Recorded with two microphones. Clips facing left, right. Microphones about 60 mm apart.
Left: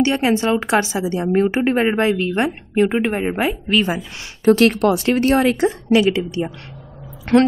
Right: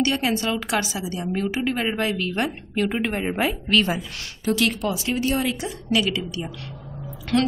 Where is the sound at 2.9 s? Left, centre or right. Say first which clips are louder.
Left 5 dB; centre.